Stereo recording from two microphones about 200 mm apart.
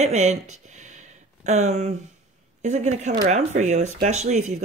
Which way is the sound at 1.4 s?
35° right (ahead or behind).